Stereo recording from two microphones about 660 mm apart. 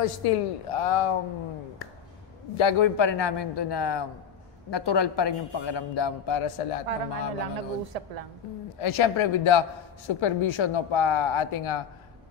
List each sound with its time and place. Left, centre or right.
0.0 s a man's voice: left
2.5 s a man's voice: left
6.9 s a woman's voice: right
8.7 s a man's voice: left